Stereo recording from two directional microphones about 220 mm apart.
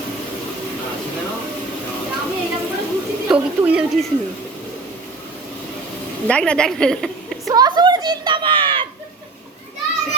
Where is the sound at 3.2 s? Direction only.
5° right (ahead or behind).